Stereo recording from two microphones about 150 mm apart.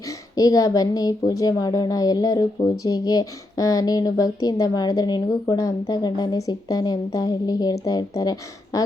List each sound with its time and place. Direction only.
0.3 s a woman's voice: 25° left (ahead or behind)